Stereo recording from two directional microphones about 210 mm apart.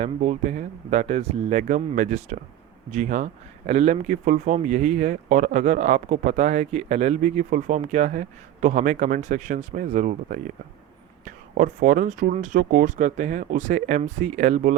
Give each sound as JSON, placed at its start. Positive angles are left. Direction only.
{"t": 0.0, "sound": "speech", "side_deg": -35}